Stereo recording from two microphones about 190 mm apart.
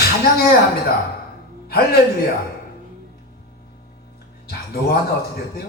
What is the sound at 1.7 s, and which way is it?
Speech, 55° left (ahead or behind).